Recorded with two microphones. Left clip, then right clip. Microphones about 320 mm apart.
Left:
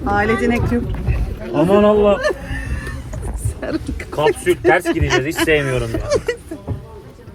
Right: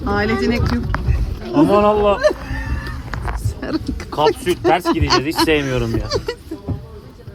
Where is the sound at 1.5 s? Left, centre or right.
Right.